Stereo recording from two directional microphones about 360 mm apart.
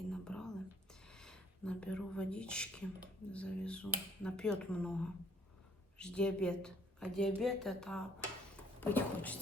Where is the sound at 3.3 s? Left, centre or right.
Centre.